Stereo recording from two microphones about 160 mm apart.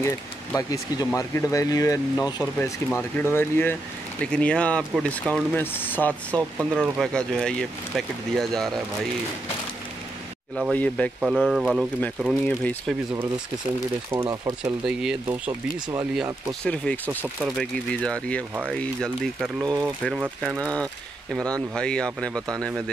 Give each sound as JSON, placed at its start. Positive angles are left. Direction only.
{"t": 0.0, "sound": "speech", "side_deg": 20}
{"t": 10.7, "sound": "speech", "side_deg": 10}
{"t": 11.1, "sound": "speech", "side_deg": -5}
{"t": 12.4, "sound": "speech", "side_deg": 10}
{"t": 14.1, "sound": "speech", "side_deg": -20}
{"t": 14.6, "sound": "speech", "side_deg": -5}
{"t": 15.2, "sound": "speech", "side_deg": -15}
{"t": 16.6, "sound": "speech", "side_deg": 10}
{"t": 19.6, "sound": "speech", "side_deg": -25}
{"t": 20.4, "sound": "speech", "side_deg": 5}